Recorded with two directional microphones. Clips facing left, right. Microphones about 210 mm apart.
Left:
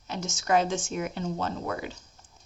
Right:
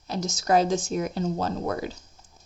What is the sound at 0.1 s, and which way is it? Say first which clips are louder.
Speech: right 3 dB; 35° right (ahead or behind).